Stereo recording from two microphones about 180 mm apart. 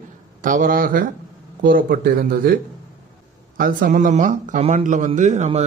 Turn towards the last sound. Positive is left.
turn(degrees=-40)  # may be behind; listen again after turning